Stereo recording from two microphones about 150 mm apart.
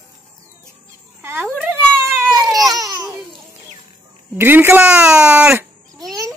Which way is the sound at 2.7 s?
25° right (ahead or behind).